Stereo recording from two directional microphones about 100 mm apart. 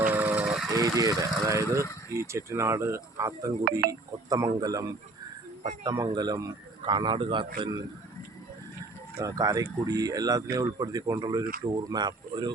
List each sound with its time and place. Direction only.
0.1 s vehicle: 15° right (ahead or behind)
0.7 s a man's voice: 35° right (ahead or behind); by 7.7 s 55° right (ahead or behind)
9.1 s speech: 35° right (ahead or behind)